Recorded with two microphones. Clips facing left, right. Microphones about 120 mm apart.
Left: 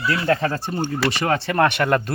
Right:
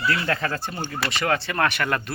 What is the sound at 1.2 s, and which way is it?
Speech, 35° left (ahead or behind).